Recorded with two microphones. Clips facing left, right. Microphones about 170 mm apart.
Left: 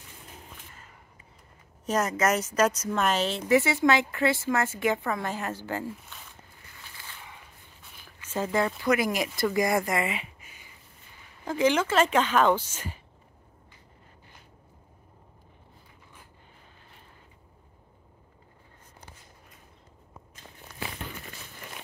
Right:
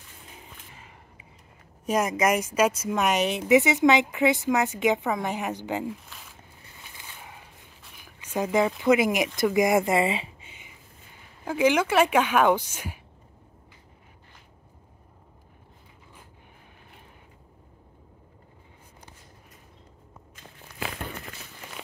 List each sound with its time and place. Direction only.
0.3 s a sound: 5° right (ahead or behind)
1.9 s speech: 10° right (ahead or behind)
5.9 s a sound: centre (ahead or behind)
6.7 s boat: 20° right (ahead or behind)
8.0 s speech: 15° right (ahead or behind)
11.4 s speech: 10° right (ahead or behind)